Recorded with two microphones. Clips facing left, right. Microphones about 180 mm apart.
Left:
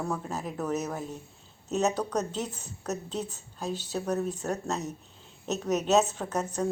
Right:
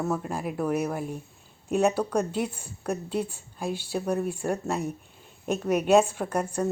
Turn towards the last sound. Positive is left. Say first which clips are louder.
# right 3 dB
turn(degrees=-10)  # may be behind; listen again after turning